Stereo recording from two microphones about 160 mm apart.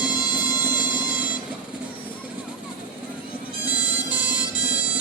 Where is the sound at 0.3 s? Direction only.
10° right (ahead or behind).